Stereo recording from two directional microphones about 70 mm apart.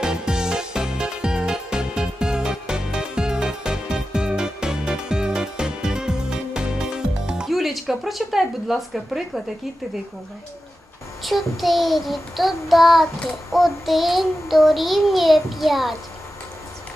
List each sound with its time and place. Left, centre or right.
0.0 s music: centre
11.2 s child singing: centre